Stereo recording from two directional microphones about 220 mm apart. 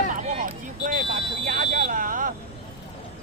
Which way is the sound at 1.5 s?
40° right (ahead or behind).